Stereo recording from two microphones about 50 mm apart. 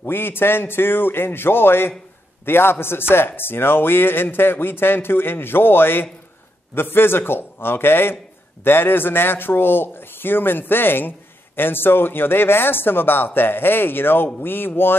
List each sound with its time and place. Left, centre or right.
0.0 s a man's voice: left